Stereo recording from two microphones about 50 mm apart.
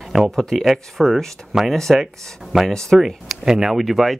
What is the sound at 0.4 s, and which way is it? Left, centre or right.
Speech, centre.